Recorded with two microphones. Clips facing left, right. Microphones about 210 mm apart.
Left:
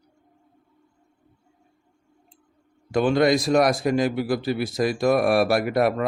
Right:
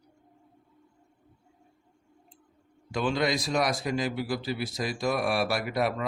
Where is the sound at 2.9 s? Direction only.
55° left (ahead or behind).